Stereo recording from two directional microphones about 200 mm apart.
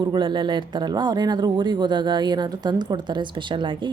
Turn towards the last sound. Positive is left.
turn(degrees=-25)  # may be behind; listen again after turning